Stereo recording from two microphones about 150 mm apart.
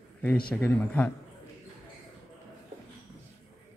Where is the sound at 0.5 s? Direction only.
10° left (ahead or behind).